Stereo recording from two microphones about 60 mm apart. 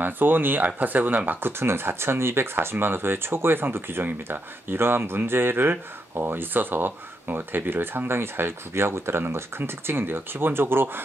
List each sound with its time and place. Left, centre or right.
0.0 s speech: right